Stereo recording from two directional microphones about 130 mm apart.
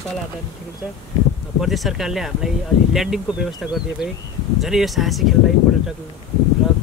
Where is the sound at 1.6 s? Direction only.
Centre (ahead or behind).